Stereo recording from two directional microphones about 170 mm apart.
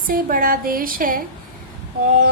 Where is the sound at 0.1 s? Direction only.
55° right (ahead or behind).